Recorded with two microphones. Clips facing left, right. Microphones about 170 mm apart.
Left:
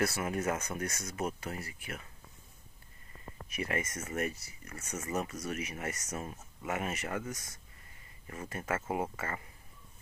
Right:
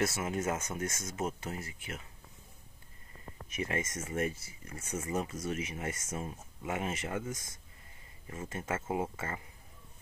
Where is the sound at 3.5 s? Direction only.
25° right (ahead or behind).